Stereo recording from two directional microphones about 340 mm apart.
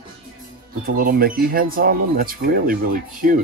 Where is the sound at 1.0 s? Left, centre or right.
Right.